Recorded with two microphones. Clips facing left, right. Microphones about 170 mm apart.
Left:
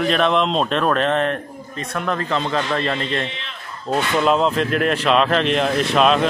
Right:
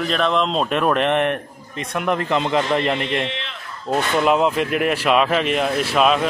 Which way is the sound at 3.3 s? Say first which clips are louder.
Right 4 dB; 80° right.